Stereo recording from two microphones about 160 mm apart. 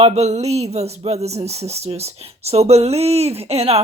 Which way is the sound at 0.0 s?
45° right (ahead or behind).